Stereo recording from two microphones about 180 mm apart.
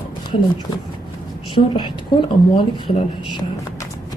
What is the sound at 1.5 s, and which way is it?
Speech, 25° left (ahead or behind).